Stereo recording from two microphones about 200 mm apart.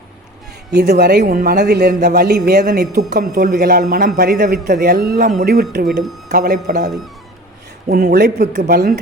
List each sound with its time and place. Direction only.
0.7 s speech: 55° right (ahead or behind)
1.2 s a man's voice: 45° right (ahead or behind)